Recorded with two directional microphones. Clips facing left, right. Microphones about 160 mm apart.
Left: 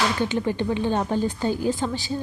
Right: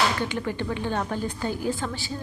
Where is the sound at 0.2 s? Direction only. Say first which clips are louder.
Left 4 dB; 25° left (ahead or behind).